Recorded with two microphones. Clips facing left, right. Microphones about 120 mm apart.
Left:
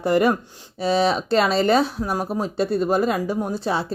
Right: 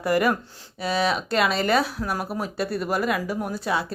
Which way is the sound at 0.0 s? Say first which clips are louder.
Left 3 dB; 25° left (ahead or behind).